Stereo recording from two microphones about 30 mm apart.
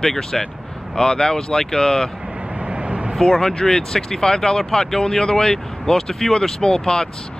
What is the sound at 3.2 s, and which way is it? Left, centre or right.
Speech, centre.